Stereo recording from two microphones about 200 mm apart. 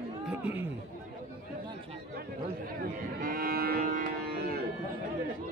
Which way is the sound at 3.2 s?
45° right (ahead or behind).